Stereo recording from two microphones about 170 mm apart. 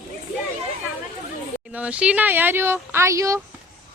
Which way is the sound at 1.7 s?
5° right (ahead or behind).